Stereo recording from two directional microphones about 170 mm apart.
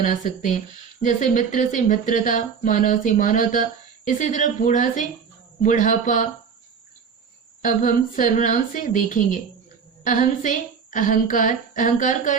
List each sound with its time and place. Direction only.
0.0 s speech: 50° left (ahead or behind)
7.6 s speech: 50° left (ahead or behind)